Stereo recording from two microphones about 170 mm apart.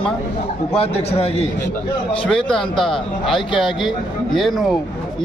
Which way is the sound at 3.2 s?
30° left (ahead or behind).